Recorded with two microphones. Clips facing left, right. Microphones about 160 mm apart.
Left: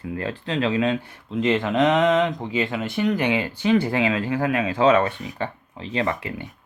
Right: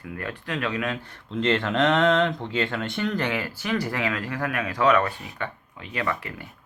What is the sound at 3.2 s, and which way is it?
Speech, 20° left (ahead or behind).